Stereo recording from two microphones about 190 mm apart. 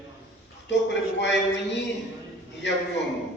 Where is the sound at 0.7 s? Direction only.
65° left (ahead or behind).